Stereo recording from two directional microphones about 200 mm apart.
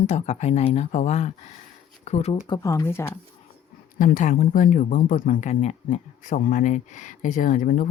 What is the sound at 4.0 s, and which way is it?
Speech, 40° left (ahead or behind).